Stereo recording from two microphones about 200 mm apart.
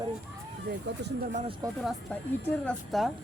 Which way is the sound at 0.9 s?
60° right (ahead or behind).